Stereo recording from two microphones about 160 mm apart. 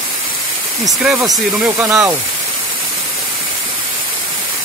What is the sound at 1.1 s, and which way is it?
Speech, 20° right (ahead or behind).